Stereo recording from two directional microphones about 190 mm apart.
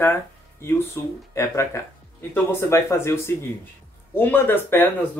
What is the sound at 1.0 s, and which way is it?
Speech, 15° left (ahead or behind).